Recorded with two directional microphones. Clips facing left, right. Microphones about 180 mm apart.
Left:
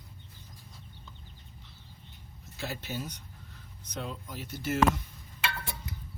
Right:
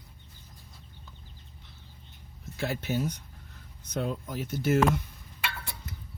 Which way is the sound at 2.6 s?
50° right (ahead or behind).